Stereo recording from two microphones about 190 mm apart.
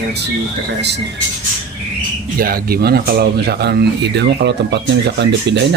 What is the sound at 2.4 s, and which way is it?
Speech, 50° right (ahead or behind).